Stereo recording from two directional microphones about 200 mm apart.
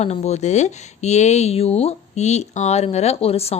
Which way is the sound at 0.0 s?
35° left (ahead or behind).